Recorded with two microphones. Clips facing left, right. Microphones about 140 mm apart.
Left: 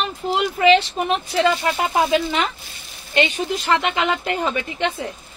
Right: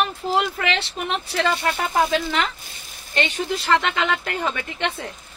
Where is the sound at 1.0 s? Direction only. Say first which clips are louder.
Left 5 dB; 25° left (ahead or behind).